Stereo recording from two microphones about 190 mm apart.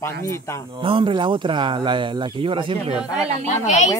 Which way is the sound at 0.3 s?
15° left (ahead or behind).